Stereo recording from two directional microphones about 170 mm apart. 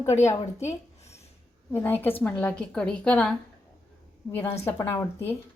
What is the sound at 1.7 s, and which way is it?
A woman's voice, 10° left (ahead or behind).